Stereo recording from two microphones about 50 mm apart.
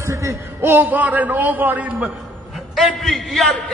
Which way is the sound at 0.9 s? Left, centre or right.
Right.